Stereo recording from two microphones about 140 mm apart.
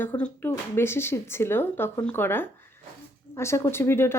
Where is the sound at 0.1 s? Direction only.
20° left (ahead or behind).